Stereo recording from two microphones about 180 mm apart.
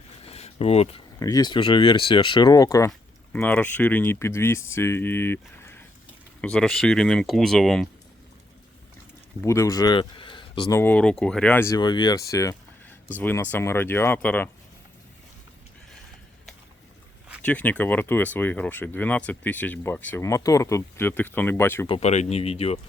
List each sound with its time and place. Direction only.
0.3 s a sound: 35° left (ahead or behind)
1.2 s speech: 20° left (ahead or behind); by 7.9 s centre (ahead or behind)
9.4 s speech: 15° left (ahead or behind)
10.8 s speech: 10° left (ahead or behind)
17.4 s speech: 10° left (ahead or behind)
21.8 s speech: 35° left (ahead or behind)